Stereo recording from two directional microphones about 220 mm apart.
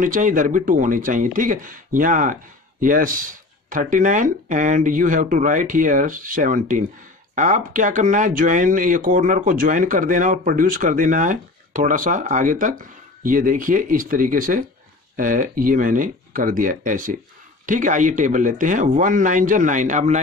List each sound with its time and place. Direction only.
0.0 s speech: 35° right (ahead or behind)